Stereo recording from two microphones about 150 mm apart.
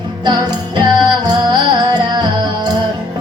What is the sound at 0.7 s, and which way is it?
Music, 30° right (ahead or behind).